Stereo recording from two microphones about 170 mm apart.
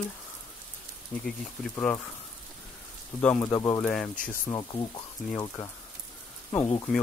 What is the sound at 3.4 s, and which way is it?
Speech, 20° left (ahead or behind).